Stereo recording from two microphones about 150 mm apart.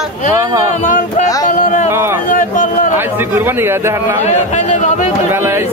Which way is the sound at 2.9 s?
15° right (ahead or behind).